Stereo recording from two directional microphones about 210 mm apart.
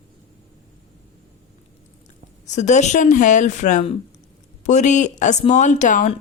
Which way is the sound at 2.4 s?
35° left (ahead or behind).